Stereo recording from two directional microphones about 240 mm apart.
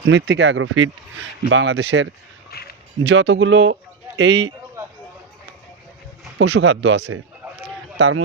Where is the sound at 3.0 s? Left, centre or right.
Right.